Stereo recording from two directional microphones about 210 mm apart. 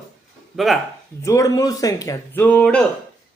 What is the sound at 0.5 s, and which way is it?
Speech, centre (ahead or behind).